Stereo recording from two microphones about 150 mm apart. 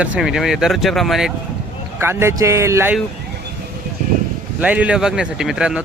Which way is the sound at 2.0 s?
15° right (ahead or behind).